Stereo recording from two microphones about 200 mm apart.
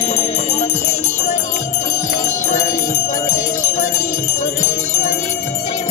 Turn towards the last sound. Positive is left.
turn(degrees=15)  # may be behind; listen again after turning